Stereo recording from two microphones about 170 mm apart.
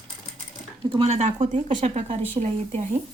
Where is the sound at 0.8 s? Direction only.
35° right (ahead or behind).